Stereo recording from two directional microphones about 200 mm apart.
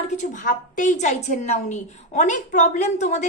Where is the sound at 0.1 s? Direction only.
40° left (ahead or behind).